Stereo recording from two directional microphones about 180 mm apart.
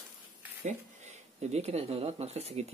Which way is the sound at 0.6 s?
40° right (ahead or behind).